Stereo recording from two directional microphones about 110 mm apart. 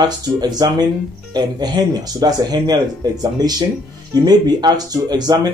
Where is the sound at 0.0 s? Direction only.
40° right (ahead or behind).